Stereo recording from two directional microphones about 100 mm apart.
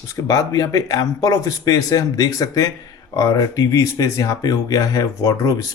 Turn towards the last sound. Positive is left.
turn(degrees=35)  # may be behind; listen again after turning